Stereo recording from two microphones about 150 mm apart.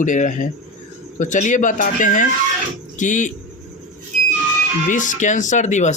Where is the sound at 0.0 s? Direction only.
55° left (ahead or behind).